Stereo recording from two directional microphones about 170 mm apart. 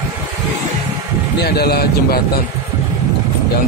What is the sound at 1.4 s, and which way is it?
Speech, 70° left (ahead or behind).